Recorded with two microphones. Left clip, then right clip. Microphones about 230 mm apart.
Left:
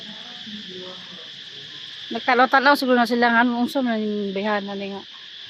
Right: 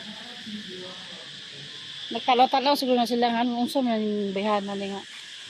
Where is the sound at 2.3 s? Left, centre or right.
Left.